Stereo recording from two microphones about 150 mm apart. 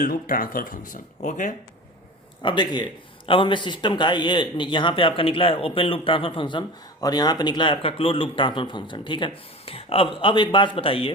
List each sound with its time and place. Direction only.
0.0 s speech: 70° left (ahead or behind); by 1.5 s 55° left (ahead or behind)
2.4 s a man's voice: 30° left (ahead or behind)